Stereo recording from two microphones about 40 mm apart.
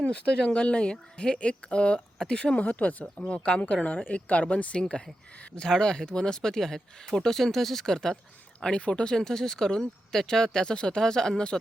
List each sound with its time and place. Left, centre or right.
0.1 s speech: left
2.6 s speech: left
4.8 s speech: left
7.9 s speech: centre